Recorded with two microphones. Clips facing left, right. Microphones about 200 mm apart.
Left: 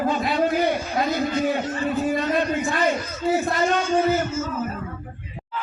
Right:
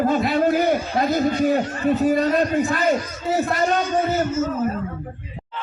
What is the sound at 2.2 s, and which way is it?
Speech, 40° right (ahead or behind).